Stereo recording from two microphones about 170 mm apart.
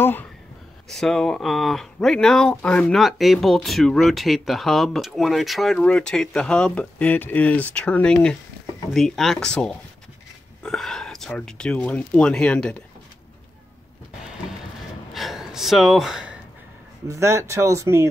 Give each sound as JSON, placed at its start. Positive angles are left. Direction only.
{"t": 0.0, "sound": "a sound", "side_deg": 10}
{"t": 0.8, "sound": "speech", "side_deg": 5}
{"t": 15.1, "sound": "gasp", "side_deg": 0}
{"t": 17.1, "sound": "speech", "side_deg": -15}